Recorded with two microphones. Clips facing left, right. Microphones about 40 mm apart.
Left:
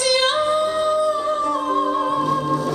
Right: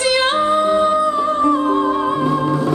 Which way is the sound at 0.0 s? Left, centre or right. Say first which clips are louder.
Right 3 dB; right.